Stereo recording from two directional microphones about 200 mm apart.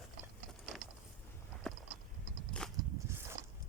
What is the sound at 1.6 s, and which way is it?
Clip-clop, centre (ahead or behind).